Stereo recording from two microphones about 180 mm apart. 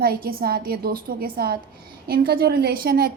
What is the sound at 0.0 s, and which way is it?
A woman's voice, 55° right (ahead or behind).